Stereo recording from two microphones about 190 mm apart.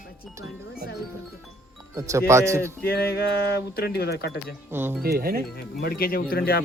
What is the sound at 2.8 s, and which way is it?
Speech, 55° left (ahead or behind).